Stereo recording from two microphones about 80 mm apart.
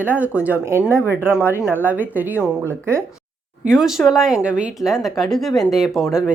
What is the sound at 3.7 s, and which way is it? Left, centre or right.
Speech, centre.